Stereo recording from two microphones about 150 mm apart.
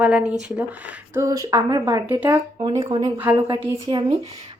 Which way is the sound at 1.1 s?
20° right (ahead or behind).